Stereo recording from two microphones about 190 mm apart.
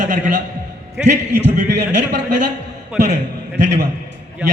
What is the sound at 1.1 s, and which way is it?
Speech, 60° right (ahead or behind).